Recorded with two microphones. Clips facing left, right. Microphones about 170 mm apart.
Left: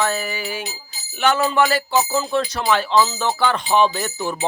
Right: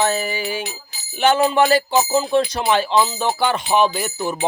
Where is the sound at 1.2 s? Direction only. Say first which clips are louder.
Right 2 dB; 20° right (ahead or behind).